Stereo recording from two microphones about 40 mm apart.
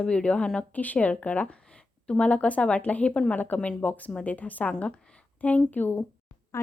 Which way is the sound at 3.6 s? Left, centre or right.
Left.